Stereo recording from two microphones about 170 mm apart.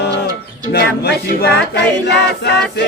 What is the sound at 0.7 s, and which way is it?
Choir, 70° left (ahead or behind).